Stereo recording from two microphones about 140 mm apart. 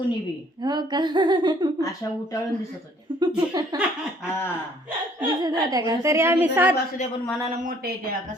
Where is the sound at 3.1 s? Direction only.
35° right (ahead or behind).